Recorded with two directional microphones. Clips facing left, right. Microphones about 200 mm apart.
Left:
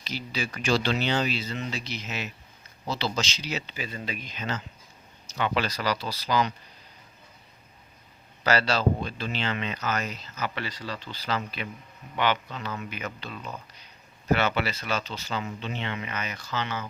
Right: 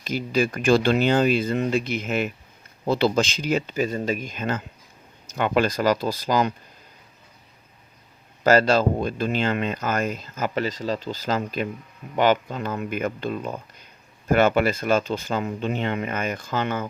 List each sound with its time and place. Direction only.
0.0 s speech: 50° right (ahead or behind)
8.4 s speech: 50° right (ahead or behind)